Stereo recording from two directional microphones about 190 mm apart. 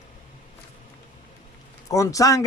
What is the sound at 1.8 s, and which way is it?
Speech, 15° left (ahead or behind).